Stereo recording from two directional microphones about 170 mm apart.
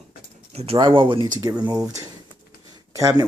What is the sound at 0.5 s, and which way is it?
Speech, 35° right (ahead or behind).